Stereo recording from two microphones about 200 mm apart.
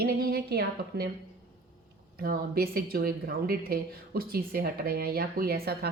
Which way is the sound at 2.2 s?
50° right (ahead or behind).